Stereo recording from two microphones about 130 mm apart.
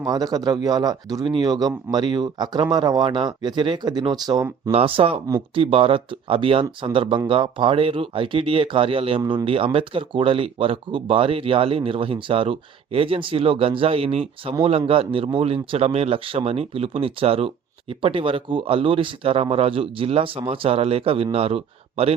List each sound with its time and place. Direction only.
0.0 s speech: 30° right (ahead or behind)
4.7 s a man's voice: 45° right (ahead or behind)